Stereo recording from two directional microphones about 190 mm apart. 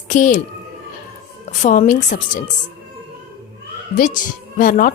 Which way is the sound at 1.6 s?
40° left (ahead or behind).